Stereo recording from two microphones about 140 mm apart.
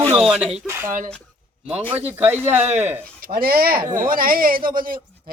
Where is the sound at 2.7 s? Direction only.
50° right (ahead or behind).